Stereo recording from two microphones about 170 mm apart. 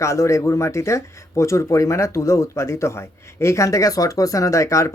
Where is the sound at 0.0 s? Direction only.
15° left (ahead or behind).